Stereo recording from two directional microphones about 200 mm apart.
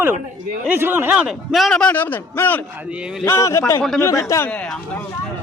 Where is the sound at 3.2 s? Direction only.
15° left (ahead or behind).